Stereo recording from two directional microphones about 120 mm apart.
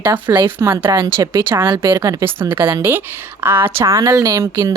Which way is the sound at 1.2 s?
25° right (ahead or behind).